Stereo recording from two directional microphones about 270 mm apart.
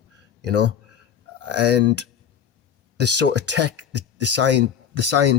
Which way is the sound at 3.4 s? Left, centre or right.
Right.